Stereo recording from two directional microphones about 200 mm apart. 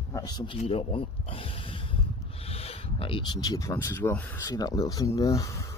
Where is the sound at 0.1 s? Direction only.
20° left (ahead or behind).